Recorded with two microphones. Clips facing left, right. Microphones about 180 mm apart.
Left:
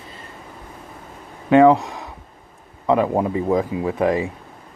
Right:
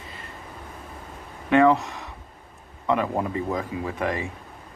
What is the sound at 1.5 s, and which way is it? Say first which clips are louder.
Speech: left 5 dB; 35° left (ahead or behind).